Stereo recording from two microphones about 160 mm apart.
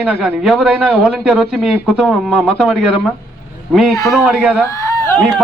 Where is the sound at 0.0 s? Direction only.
Centre (ahead or behind).